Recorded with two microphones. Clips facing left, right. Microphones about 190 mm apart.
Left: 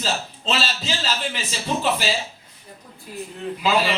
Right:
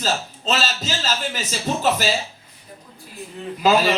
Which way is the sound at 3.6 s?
40° right (ahead or behind).